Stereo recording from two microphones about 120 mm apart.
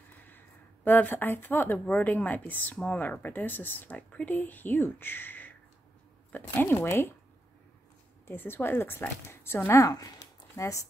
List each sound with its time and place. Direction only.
0.1 s a sound: 15° left (ahead or behind)
0.8 s a woman's voice: 15° left (ahead or behind)
6.6 s a woman's voice: 15° left (ahead or behind)
8.3 s a woman's voice: 20° left (ahead or behind)